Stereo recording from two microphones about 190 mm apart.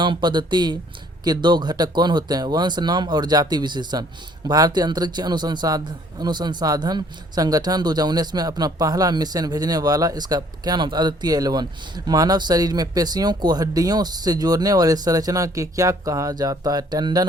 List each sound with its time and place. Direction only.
0.0 s a man's voice: 25° right (ahead or behind)